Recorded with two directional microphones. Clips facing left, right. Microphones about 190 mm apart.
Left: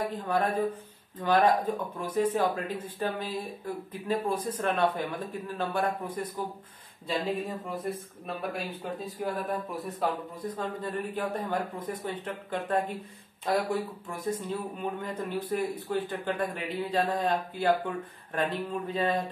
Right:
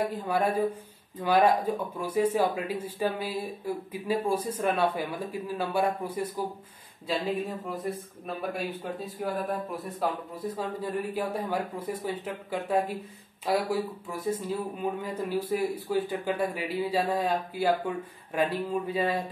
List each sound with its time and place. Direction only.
0.1 s speech: 10° right (ahead or behind)